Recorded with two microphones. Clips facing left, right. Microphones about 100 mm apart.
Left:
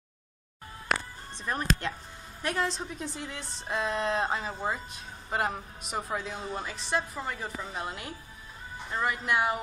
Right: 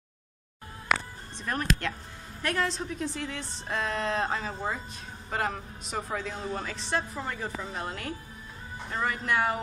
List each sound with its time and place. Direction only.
1.4 s a man's voice: 15° left (ahead or behind)